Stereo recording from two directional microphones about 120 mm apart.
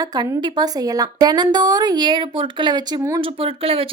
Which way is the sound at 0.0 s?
35° right (ahead or behind).